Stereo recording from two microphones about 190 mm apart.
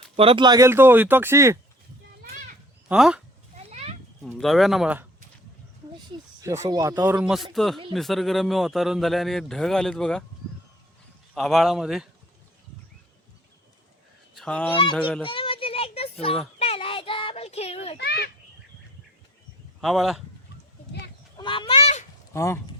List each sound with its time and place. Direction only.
0.2 s speech: 25° right (ahead or behind)
2.9 s speech: 5° right (ahead or behind)
3.5 s a sound: 35° right (ahead or behind)
4.4 s speech: centre (ahead or behind)
6.4 s speech: 15° right (ahead or behind); by 10.2 s 5° left (ahead or behind)
11.3 s speech: centre (ahead or behind)
14.3 s honk: 5° left (ahead or behind)
15.2 s a sound: 30° left (ahead or behind)
16.6 s child singing: 30° left (ahead or behind)
17.9 s a child's voice: 60° left (ahead or behind)
19.8 s speech: centre (ahead or behind)
21.3 s fowl: 25° left (ahead or behind)
22.3 s speech: 15° left (ahead or behind)